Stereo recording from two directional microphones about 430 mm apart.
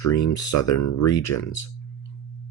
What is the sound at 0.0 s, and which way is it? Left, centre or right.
Speech, left.